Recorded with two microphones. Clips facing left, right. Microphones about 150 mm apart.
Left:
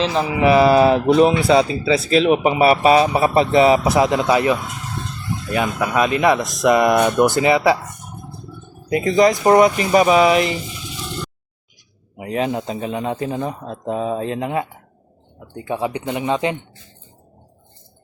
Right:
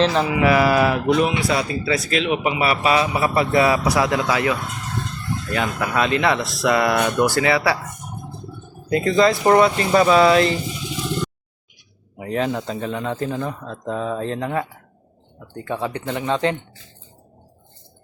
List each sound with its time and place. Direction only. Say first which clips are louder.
0.0 s mantra: right 1 dB; 5° left (ahead or behind)
0.3 s speech: left 3 dB; 25° left (ahead or behind)
5.8 s speech: left 3 dB; 15° left (ahead or behind)
8.9 s speech: left 2 dB; 20° left (ahead or behind)
12.1 s speech: left 1 dB; 20° left (ahead or behind)
15.5 s speech: left 3 dB; 15° left (ahead or behind)